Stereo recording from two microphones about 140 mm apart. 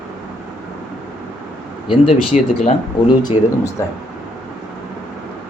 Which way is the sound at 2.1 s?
50° left (ahead or behind).